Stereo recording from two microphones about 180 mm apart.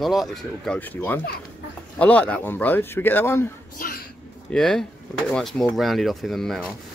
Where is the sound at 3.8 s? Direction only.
55° left (ahead or behind).